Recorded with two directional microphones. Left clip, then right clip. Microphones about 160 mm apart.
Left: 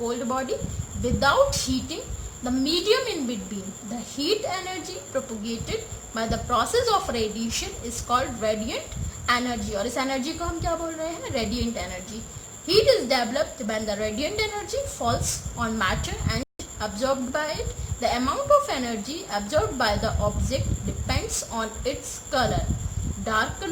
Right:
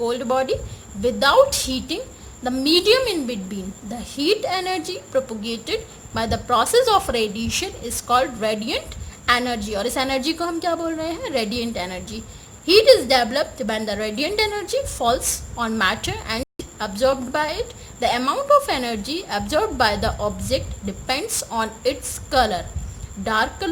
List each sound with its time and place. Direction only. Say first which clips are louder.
0.0 s a woman's voice: right 6 dB; 60° right (ahead or behind)